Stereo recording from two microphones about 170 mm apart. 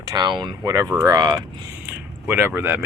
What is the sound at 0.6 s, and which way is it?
Speech, 15° right (ahead or behind).